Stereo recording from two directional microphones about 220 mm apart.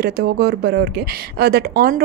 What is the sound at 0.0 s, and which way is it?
Speech, 45° right (ahead or behind).